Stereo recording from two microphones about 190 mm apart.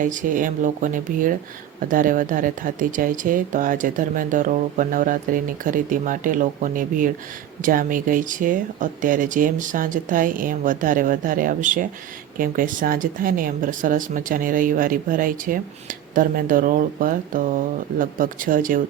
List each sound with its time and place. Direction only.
0.0 s speech: 45° right (ahead or behind)